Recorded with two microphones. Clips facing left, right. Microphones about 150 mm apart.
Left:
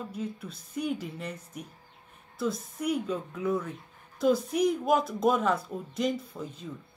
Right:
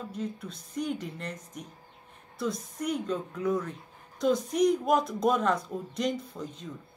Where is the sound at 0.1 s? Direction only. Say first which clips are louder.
Even; 5° left (ahead or behind).